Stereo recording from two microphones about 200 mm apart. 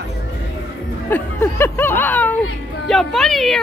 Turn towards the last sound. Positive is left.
turn(degrees=0)  # may be behind; listen again after turning